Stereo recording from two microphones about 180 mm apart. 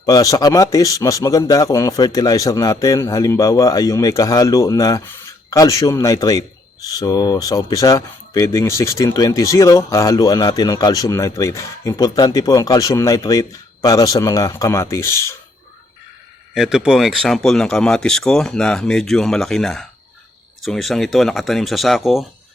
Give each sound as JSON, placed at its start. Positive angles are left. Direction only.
{"t": 0.0, "sound": "speech", "side_deg": 20}
{"t": 16.6, "sound": "speech", "side_deg": -5}